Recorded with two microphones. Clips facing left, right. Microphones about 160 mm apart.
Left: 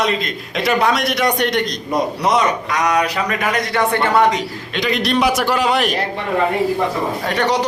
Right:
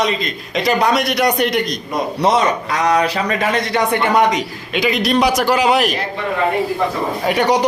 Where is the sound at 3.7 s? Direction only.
15° right (ahead or behind).